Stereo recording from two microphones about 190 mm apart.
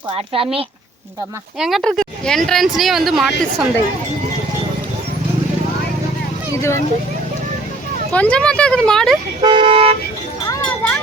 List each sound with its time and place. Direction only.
0.1 s speech: 30° right (ahead or behind)
1.5 s a woman's voice: centre (ahead or behind)
6.6 s speech: 15° left (ahead or behind)
8.1 s a woman's voice: 5° left (ahead or behind)
9.4 s speech: 25° right (ahead or behind)